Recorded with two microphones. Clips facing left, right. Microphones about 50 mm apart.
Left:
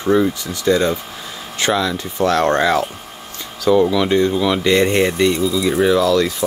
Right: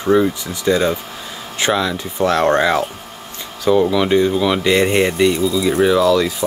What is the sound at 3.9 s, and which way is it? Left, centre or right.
Speech, centre.